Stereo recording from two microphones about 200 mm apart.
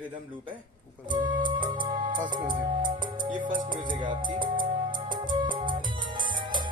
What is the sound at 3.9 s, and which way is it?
Music, 25° right (ahead or behind).